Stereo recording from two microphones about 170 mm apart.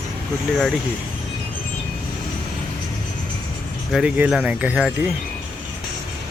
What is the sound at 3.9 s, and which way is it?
Speech, 5° right (ahead or behind).